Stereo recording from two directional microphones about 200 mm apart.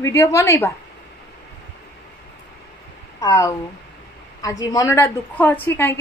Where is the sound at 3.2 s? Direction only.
15° left (ahead or behind).